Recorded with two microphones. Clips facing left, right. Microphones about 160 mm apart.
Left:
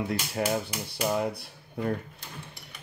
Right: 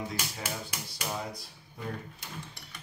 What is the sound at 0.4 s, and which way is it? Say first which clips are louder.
Speech: left 10 dB; 65° left (ahead or behind).